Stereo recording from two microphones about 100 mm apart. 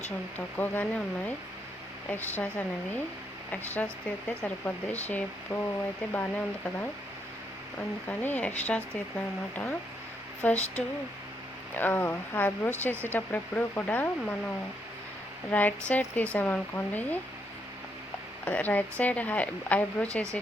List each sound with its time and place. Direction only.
0.3 s speech: 20° left (ahead or behind)
8.2 s speech: 20° left (ahead or behind)
18.4 s speech: 15° left (ahead or behind)